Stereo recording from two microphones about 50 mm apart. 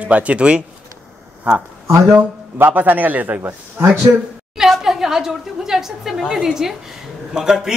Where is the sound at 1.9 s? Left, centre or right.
Right.